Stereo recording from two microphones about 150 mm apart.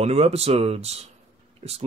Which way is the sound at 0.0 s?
45° right (ahead or behind).